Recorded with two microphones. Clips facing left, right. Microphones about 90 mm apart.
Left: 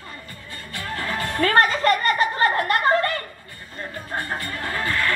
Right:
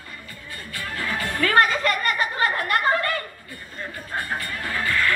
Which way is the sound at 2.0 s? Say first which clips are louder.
Left 3 dB; 30° left (ahead or behind).